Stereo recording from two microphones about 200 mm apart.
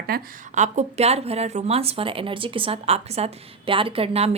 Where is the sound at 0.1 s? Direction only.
45° right (ahead or behind).